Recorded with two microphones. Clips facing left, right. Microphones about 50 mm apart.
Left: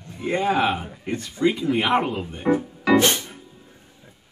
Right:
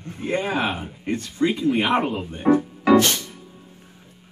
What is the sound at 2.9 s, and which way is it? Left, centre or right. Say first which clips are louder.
Music: right 1 dB; left.